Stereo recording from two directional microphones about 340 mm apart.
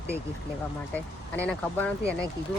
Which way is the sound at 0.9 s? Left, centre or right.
Centre.